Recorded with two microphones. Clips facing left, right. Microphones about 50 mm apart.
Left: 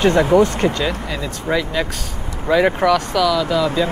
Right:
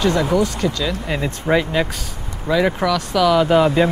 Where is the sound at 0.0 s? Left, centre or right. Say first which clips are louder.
Left 4 dB; left.